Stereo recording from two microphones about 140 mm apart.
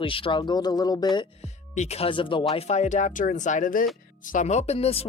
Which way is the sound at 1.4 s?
50° left (ahead or behind).